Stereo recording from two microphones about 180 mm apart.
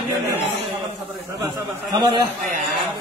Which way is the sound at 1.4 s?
25° right (ahead or behind).